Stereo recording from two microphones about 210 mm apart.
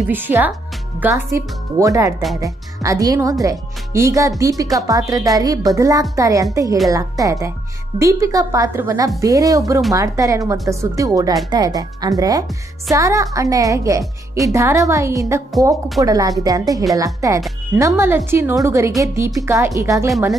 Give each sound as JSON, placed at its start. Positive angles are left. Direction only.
{"t": 0.0, "sound": "speech", "side_deg": -10}